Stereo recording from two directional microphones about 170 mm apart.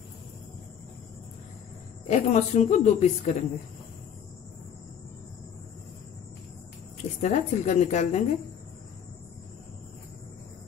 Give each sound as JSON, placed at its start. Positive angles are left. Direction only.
{"t": 2.0, "sound": "speech", "side_deg": 40}
{"t": 7.2, "sound": "speech", "side_deg": 45}